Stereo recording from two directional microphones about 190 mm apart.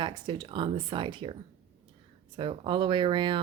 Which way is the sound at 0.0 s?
25° right (ahead or behind).